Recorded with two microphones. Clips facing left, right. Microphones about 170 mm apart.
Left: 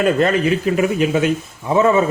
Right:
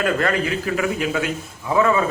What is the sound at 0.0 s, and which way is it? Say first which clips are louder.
A man's voice: left 5 dB; 20° left (ahead or behind).